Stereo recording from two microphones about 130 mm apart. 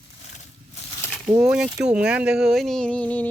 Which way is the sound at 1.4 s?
5° right (ahead or behind).